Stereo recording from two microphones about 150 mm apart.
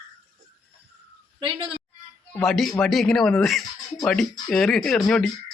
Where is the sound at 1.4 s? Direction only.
35° right (ahead or behind).